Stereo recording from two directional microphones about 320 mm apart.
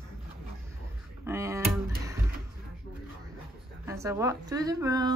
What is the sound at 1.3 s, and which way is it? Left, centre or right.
Speech, centre.